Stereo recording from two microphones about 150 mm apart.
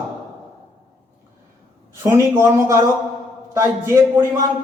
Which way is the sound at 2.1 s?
20° right (ahead or behind).